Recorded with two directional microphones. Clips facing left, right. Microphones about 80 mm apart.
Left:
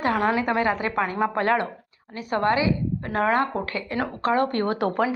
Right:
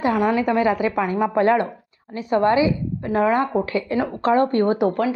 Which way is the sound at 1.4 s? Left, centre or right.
Right.